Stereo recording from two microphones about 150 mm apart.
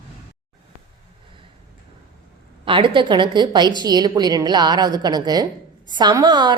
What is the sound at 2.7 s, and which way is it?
A woman's voice, 35° right (ahead or behind).